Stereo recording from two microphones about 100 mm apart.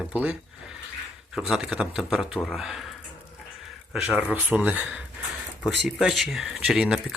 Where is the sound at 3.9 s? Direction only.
15° right (ahead or behind).